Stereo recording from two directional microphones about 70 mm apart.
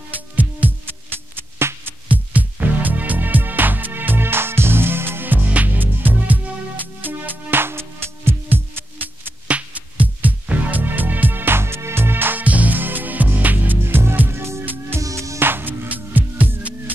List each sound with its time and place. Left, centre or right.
0.4 s music: right
1.6 s music: right
2.0 s music: right
9.5 s music: right
15.0 s music: right